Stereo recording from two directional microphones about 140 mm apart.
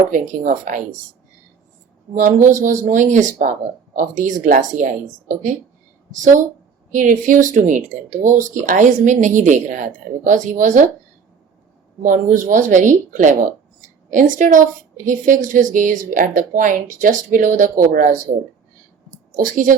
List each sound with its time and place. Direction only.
0.1 s a woman's voice: 70° right (ahead or behind)
2.1 s a woman's voice: 65° right (ahead or behind)
6.9 s speech: 65° right (ahead or behind)
12.0 s a woman's voice: 70° right (ahead or behind)
19.4 s a woman's voice: 70° right (ahead or behind)